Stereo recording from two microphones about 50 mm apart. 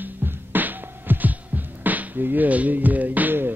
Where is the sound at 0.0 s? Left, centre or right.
Right.